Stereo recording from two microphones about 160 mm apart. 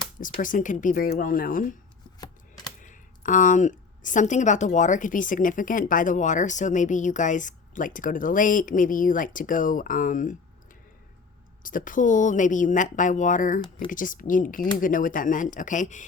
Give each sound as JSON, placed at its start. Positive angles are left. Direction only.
{"t": 0.2, "sound": "a woman's voice", "side_deg": 55}
{"t": 2.8, "sound": "a woman's voice", "side_deg": 55}
{"t": 11.6, "sound": "a woman's voice", "side_deg": 55}